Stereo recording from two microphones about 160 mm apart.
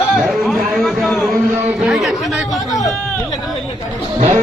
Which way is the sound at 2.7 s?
20° left (ahead or behind).